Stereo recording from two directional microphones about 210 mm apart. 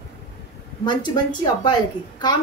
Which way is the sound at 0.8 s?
20° left (ahead or behind).